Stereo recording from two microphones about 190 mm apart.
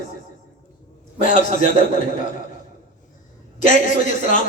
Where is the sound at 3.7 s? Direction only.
40° left (ahead or behind).